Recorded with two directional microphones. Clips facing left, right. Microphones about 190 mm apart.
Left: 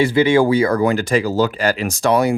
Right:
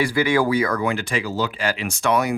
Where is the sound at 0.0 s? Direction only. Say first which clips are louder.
Left 6 dB; 25° left (ahead or behind).